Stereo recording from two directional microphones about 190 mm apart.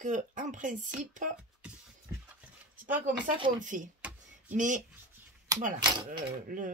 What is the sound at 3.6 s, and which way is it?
Speech, 40° right (ahead or behind).